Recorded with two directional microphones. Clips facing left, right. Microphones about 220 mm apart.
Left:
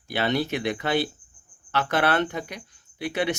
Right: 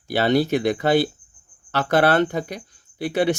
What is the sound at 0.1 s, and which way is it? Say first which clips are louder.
Speech: right 6 dB; 35° right (ahead or behind).